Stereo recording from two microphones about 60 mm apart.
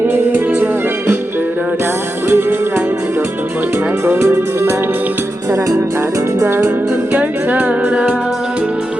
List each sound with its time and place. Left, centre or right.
0.1 s music: right
2.3 s music: right
4.0 s music: right
6.5 s music: right
7.2 s music: right